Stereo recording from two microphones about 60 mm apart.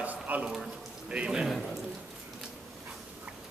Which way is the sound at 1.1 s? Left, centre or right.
Centre.